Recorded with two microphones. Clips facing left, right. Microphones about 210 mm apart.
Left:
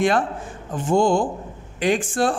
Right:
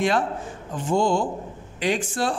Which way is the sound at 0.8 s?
50° left (ahead or behind).